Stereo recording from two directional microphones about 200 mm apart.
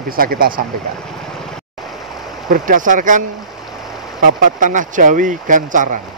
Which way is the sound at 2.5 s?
40° right (ahead or behind).